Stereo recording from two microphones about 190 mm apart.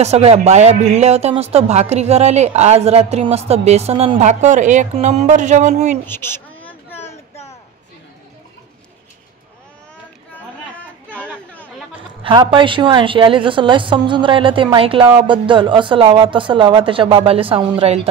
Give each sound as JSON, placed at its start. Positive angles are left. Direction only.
{"t": 0.0, "sound": "a woman's voice", "side_deg": -35}
{"t": 6.0, "sound": "a sound", "side_deg": 10}
{"t": 10.8, "sound": "chatter", "side_deg": 5}
{"t": 12.2, "sound": "a woman's voice", "side_deg": -25}